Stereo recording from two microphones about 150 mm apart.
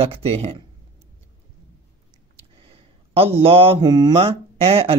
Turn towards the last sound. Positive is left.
turn(degrees=-40)  # may be behind; listen again after turning